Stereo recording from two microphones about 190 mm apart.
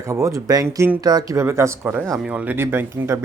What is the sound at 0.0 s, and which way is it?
Speech, 15° right (ahead or behind).